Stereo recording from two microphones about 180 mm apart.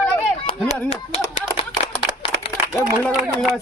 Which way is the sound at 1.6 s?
30° left (ahead or behind).